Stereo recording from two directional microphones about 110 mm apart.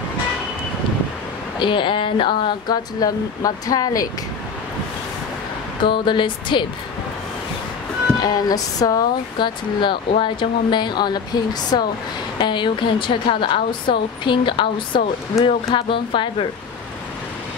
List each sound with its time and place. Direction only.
1.6 s a woman's voice: 50° left (ahead or behind)
5.9 s a woman's voice: 45° left (ahead or behind)
8.2 s a woman's voice: 35° left (ahead or behind); by 16.4 s 50° left (ahead or behind)